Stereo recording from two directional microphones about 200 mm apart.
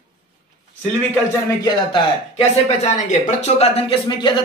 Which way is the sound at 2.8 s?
35° left (ahead or behind).